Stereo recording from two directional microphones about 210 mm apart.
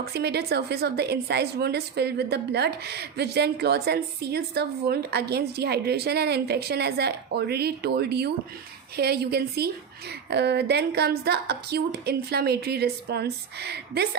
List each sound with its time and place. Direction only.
0.0 s a woman's voice: 50° right (ahead or behind)